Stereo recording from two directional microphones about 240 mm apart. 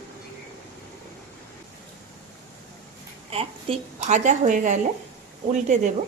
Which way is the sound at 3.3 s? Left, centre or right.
Right.